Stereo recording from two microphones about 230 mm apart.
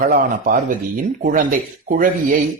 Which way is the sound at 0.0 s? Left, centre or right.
Right.